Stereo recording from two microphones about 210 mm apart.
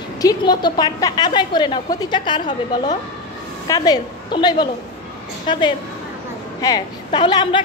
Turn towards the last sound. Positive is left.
turn(degrees=20)  # may be behind; listen again after turning